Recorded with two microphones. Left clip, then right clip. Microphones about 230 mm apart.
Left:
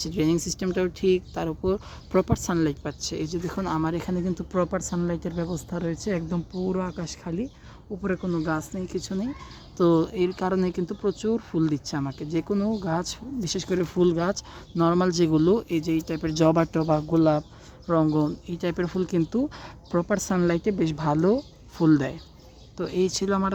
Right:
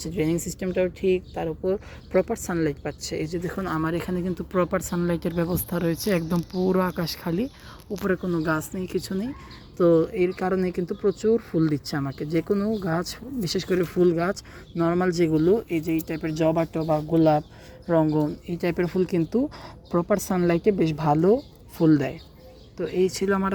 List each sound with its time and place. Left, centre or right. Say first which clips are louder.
0.0 s speech: left 1 dB; centre
3.2 s speech: even; centre
9.7 s speech: right 2 dB; centre